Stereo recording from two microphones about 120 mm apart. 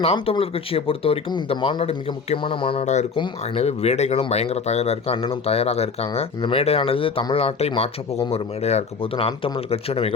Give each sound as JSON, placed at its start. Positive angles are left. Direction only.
{"t": 0.0, "sound": "speech", "side_deg": 55}
{"t": 2.8, "sound": "speech", "side_deg": 75}
{"t": 3.5, "sound": "speech", "side_deg": 60}